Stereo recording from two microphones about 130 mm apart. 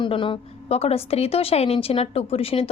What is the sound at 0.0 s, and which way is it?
A woman's voice, 40° left (ahead or behind).